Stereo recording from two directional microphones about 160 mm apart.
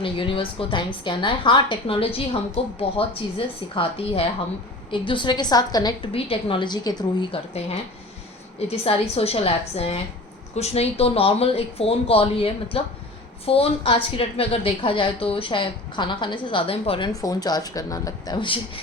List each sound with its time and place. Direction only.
0.0 s a woman's voice: 30° left (ahead or behind)
8.5 s a woman's voice: 40° left (ahead or behind)
17.1 s a woman's voice: 20° left (ahead or behind)